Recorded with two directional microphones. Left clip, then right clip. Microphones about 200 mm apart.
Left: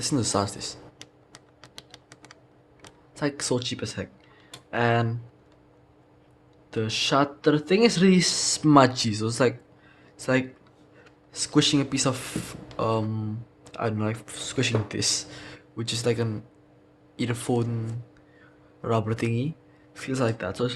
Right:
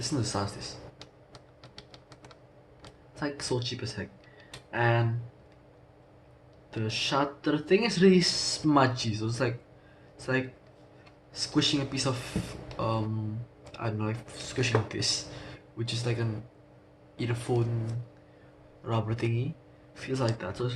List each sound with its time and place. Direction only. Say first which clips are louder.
0.0 s speech: left 6 dB; 55° left (ahead or behind)
3.2 s speech: left 5 dB; 50° left (ahead or behind)
6.7 s speech: left 6 dB; 50° left (ahead or behind)
18.8 s speech: left 6 dB; 50° left (ahead or behind)